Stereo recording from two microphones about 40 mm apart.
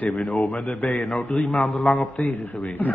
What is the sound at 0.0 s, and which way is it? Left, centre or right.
A man's voice, left.